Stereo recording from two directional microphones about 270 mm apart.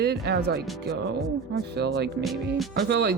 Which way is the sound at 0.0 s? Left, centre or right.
Right.